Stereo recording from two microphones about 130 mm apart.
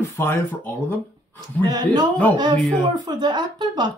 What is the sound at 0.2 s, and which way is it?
Speech, 20° left (ahead or behind).